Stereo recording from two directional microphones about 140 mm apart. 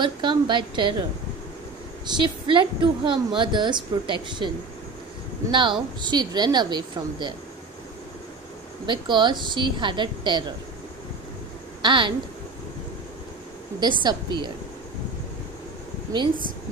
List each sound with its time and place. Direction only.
0.0 s a woman's voice: 35° right (ahead or behind)
2.0 s a woman's voice: 35° right (ahead or behind)
5.5 s a woman's voice: 35° right (ahead or behind)
8.8 s a woman's voice: 35° right (ahead or behind)
11.8 s a woman's voice: 35° right (ahead or behind)
13.7 s a woman's voice: 35° right (ahead or behind)